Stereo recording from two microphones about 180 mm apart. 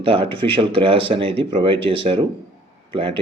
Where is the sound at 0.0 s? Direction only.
30° right (ahead or behind).